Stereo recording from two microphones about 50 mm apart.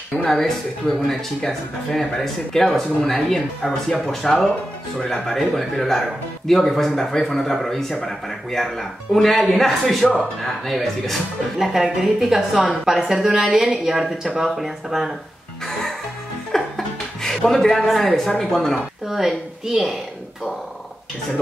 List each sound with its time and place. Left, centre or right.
0.2 s a woman's voice: centre
16.5 s a sound: centre
17.5 s speech: centre
19.0 s speech: centre